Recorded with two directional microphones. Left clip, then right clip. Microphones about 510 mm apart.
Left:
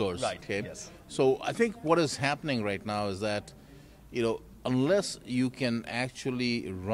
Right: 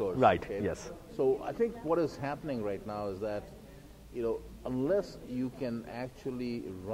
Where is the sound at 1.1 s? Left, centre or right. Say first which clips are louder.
Left 4 dB; left.